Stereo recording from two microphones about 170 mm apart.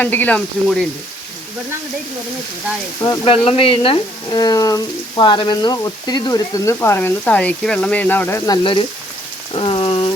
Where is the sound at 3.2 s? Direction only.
30° left (ahead or behind); by 8.4 s 10° left (ahead or behind).